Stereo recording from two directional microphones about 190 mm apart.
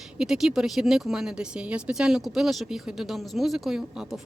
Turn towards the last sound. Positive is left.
turn(degrees=0)  # may be behind; listen again after turning